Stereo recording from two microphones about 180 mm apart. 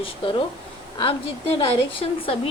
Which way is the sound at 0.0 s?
30° left (ahead or behind).